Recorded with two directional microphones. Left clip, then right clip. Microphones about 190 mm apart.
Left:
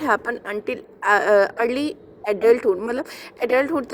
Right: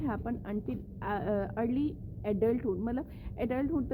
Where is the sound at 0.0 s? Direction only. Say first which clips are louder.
Left 15 dB; 20° left (ahead or behind).